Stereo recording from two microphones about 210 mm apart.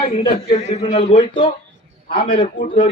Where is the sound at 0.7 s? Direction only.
30° left (ahead or behind).